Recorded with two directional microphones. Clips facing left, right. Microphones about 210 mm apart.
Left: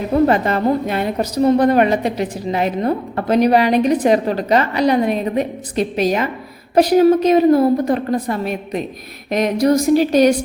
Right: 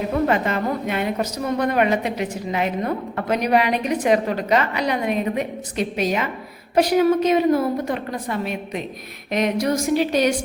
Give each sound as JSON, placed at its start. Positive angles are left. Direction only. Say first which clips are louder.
{"t": 0.3, "sound": "a woman's voice", "louder": "left 5 dB", "side_deg": 35}